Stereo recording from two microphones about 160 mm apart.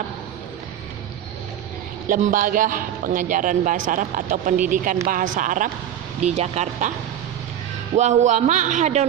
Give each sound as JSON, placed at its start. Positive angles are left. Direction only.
{"t": 2.0, "sound": "a man's voice", "side_deg": -55}
{"t": 6.2, "sound": "a man's voice", "side_deg": -40}
{"t": 7.9, "sound": "a man's voice", "side_deg": -45}